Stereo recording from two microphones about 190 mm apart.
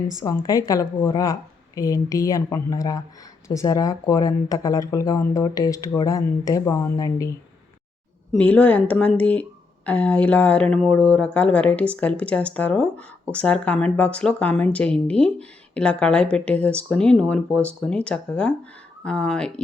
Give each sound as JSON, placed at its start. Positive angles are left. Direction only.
{"t": 0.2, "sound": "speech", "side_deg": 20}